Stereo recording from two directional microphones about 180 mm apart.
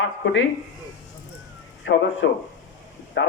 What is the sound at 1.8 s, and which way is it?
A man's voice, 90° left.